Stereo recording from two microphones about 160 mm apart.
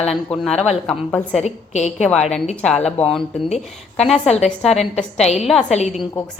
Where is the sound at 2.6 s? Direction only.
5° left (ahead or behind).